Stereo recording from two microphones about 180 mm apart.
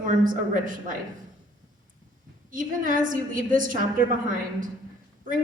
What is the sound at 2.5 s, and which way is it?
A woman's voice, 50° right (ahead or behind).